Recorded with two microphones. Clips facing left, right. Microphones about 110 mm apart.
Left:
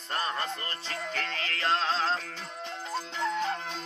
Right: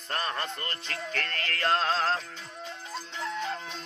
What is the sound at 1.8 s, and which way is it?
Music, 5° right (ahead or behind).